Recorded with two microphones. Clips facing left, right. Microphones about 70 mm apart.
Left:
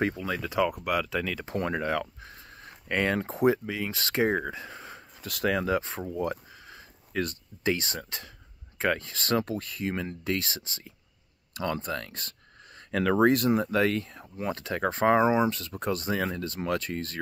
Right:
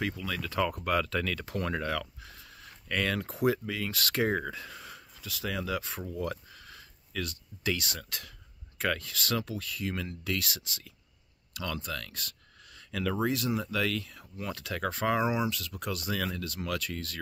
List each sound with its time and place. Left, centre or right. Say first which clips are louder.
0.0 s speech: left 5 dB; left
0.6 s speech: left 2 dB; centre
1.4 s speech: left 3 dB; left
5.2 s speech: left 8 dB; left
5.7 s speech: left 6 dB; left
7.2 s speech: left 6 dB; left
12.9 s speech: left 8 dB; left